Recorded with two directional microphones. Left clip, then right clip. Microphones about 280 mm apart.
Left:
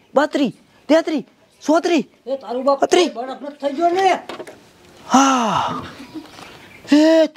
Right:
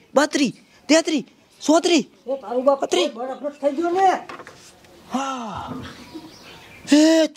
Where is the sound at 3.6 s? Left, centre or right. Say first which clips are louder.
Left 2 dB; left.